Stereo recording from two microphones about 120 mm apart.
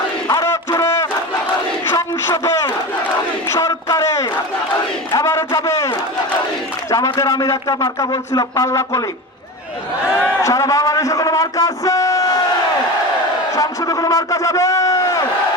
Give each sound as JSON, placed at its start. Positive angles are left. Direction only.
{"t": 0.3, "sound": "a sound", "side_deg": 25}
{"t": 0.8, "sound": "crowd", "side_deg": 20}
{"t": 1.9, "sound": "a sound", "side_deg": 25}
{"t": 6.9, "sound": "a man's voice", "side_deg": 30}
{"t": 10.4, "sound": "a man's voice", "side_deg": 25}
{"t": 13.6, "sound": "speech", "side_deg": 30}